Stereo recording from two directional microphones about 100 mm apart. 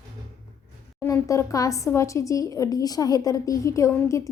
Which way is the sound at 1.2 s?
35° left (ahead or behind).